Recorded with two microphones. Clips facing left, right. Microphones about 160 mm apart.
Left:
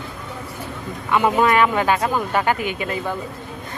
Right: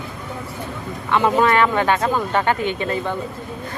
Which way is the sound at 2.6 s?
30° right (ahead or behind).